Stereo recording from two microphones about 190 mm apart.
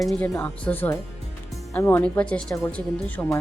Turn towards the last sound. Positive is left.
turn(degrees=10)  # may be behind; listen again after turning